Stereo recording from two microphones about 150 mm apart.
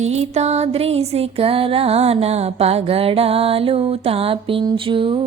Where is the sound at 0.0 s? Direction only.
45° right (ahead or behind).